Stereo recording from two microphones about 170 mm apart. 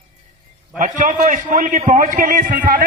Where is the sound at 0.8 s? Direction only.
50° right (ahead or behind).